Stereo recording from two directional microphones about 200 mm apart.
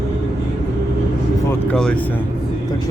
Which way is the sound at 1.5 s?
5° left (ahead or behind).